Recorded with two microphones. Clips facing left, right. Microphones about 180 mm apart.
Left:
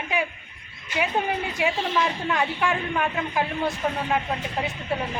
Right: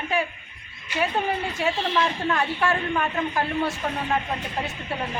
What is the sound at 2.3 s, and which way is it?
Speech, 10° left (ahead or behind).